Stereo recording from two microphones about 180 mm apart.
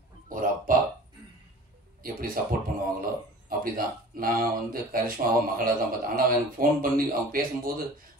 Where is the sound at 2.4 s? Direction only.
50° right (ahead or behind).